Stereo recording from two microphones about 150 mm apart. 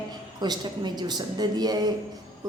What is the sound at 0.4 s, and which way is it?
A woman's voice, 30° right (ahead or behind).